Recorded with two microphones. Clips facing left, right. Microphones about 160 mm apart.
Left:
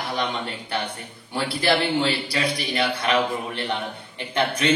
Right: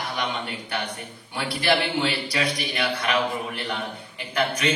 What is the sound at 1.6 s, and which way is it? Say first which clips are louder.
A man's voice: left 1 dB; 30° left (ahead or behind).